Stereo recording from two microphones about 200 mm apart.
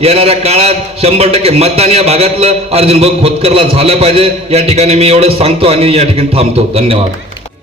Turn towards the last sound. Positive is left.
turn(degrees=-30)  # may be behind; listen again after turning